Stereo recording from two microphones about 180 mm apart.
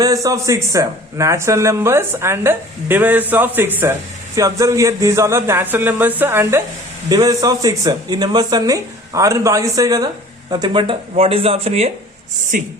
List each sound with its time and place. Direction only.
0.0 s speech: 20° right (ahead or behind); by 11.9 s 35° right (ahead or behind)
12.5 s speech: 50° right (ahead or behind)